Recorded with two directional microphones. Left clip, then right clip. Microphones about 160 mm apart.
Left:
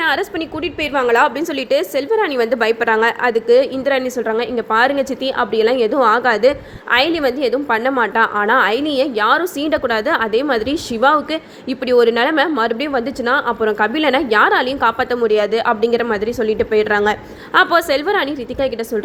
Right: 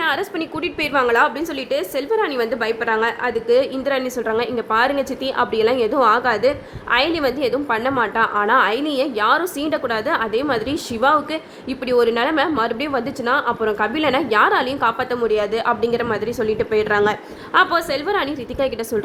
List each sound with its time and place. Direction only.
0.0 s a woman's voice: 20° left (ahead or behind)
3.4 s a woman's voice: 20° left (ahead or behind)
17.7 s a woman's voice: 35° left (ahead or behind)